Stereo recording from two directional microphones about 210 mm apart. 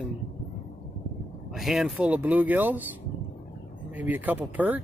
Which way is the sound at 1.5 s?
Centre (ahead or behind).